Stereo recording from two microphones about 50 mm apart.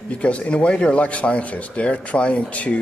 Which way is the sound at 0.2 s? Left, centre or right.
Left.